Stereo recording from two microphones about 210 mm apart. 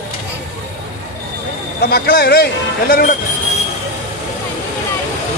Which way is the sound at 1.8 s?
45° left (ahead or behind).